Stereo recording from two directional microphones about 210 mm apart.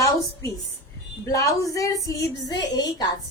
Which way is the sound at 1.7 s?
15° left (ahead or behind).